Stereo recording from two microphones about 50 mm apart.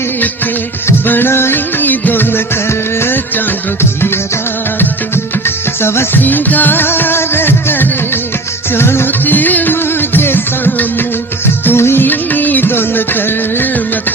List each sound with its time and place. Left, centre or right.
1.0 s music: left
1.3 s music: left
2.6 s music: left
5.8 s music: left
6.1 s music: left
9.2 s music: left
11.6 s music: left
12.0 s music: left